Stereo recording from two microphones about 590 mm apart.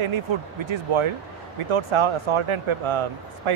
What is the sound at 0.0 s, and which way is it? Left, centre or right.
Speech, right.